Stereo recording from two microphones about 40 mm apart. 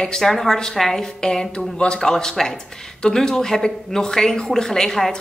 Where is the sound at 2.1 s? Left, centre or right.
Centre.